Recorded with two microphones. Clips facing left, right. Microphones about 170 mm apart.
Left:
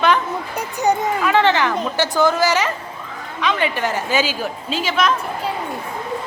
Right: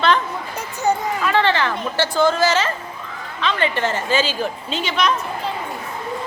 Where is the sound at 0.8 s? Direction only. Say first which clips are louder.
Left 2 dB; 15° left (ahead or behind).